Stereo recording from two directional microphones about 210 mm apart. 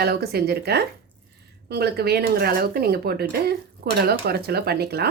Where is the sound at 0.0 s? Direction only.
50° right (ahead or behind).